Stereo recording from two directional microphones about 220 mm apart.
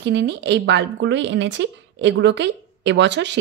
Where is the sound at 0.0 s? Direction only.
50° right (ahead or behind).